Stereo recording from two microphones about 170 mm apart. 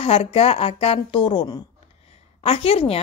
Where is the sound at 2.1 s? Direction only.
35° left (ahead or behind).